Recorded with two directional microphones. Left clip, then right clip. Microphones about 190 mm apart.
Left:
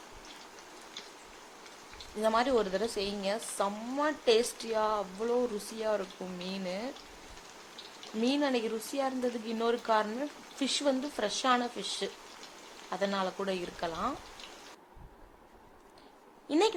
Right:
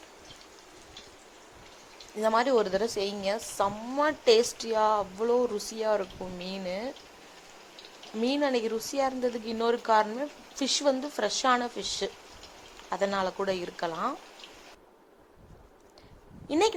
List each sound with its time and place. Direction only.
2.2 s a woman's voice: 25° right (ahead or behind)
8.2 s a woman's voice: 25° right (ahead or behind)
16.5 s a woman's voice: 20° right (ahead or behind)